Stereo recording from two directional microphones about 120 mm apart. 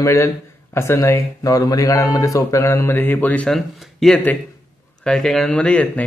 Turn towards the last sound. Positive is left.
turn(degrees=10)  # may be behind; listen again after turning